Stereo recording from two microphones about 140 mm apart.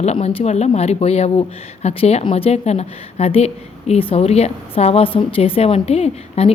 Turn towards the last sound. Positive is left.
turn(degrees=45)  # may be behind; listen again after turning